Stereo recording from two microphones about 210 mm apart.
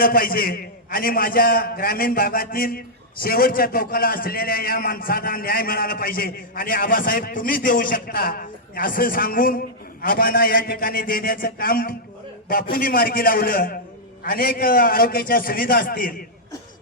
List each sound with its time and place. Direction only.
0.0 s a man's voice: 45° left (ahead or behind)